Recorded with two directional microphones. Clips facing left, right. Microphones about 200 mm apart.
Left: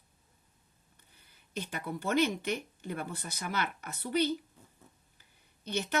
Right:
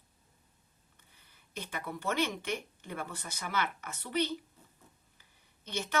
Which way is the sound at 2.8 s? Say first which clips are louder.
Left 3 dB; 35° left (ahead or behind).